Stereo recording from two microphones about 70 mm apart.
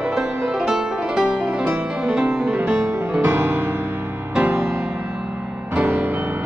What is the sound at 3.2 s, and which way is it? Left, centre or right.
Music, right.